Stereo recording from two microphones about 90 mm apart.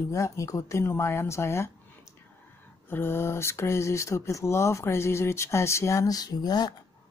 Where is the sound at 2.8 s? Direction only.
25° left (ahead or behind); by 6.7 s 45° left (ahead or behind).